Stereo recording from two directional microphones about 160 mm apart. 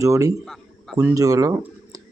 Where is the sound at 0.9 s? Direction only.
20° right (ahead or behind).